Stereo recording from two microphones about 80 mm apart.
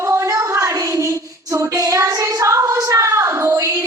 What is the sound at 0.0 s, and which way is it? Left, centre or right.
Child singing, right.